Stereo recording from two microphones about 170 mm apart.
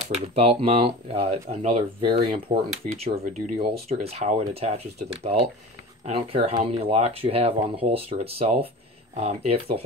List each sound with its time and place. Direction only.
0.3 s speech: 35° right (ahead or behind)
2.7 s speech: 45° right (ahead or behind)